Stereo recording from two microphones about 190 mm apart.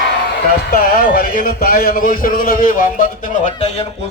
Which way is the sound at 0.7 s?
50° left (ahead or behind).